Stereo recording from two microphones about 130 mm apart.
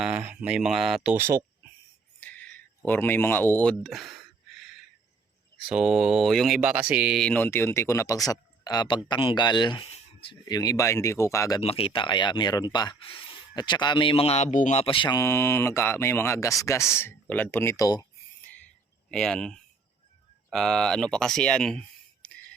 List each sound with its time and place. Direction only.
0.0 s speech: 10° right (ahead or behind)
1.1 s speech: 20° right (ahead or behind)
2.2 s a sound: 10° left (ahead or behind)
5.5 s speech: 5° right (ahead or behind)
6.6 s speech: 10° right (ahead or behind)
7.2 s speech: 10° left (ahead or behind); by 9.9 s 35° left (ahead or behind)
9.9 s a sound: 45° left (ahead or behind)
10.5 s speech: 30° left (ahead or behind)
11.6 s speech: 50° left (ahead or behind); by 13.0 s 30° left (ahead or behind)
13.0 s speech: 45° left (ahead or behind)
13.6 s speech: 35° left (ahead or behind); by 14.8 s 70° left (ahead or behind)
14.8 s speech: 40° left (ahead or behind)
15.1 s speech: 20° left (ahead or behind)
19.1 s speech: 5° left (ahead or behind)